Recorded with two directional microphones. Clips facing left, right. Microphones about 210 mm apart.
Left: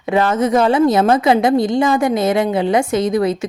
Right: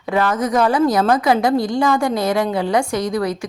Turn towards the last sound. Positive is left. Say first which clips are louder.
# left 4 dB
turn(degrees=25)  # may be behind; listen again after turning